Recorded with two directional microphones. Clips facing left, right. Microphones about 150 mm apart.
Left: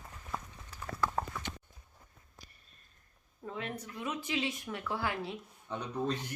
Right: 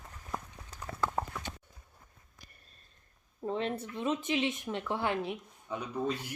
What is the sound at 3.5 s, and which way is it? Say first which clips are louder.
Speech: right 7 dB; 30° right (ahead or behind).